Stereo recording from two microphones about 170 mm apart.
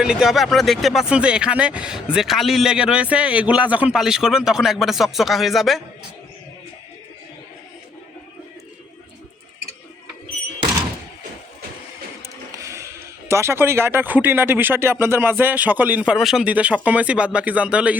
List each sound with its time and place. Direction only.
0.0 s speech: 5° right (ahead or behind)
12.5 s printer: 20° right (ahead or behind)
13.2 s speech: 15° right (ahead or behind)